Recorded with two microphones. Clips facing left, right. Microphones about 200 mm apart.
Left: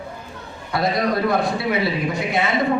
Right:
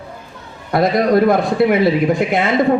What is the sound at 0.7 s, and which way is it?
Speech, 50° right (ahead or behind).